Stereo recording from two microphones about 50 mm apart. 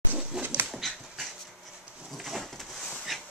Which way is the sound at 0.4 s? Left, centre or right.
Right.